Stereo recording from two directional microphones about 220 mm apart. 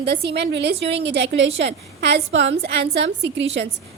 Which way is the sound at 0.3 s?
50° right (ahead or behind).